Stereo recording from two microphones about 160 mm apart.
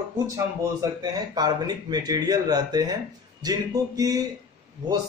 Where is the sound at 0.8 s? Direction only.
20° right (ahead or behind).